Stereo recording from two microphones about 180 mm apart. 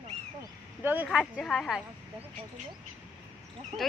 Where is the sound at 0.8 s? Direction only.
10° right (ahead or behind).